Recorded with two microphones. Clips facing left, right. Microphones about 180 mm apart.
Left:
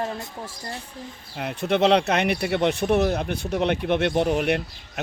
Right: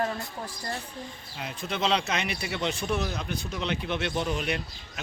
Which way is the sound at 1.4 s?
60° left (ahead or behind).